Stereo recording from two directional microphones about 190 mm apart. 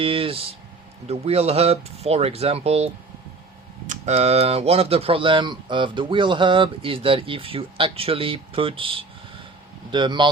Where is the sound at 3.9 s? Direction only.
35° right (ahead or behind).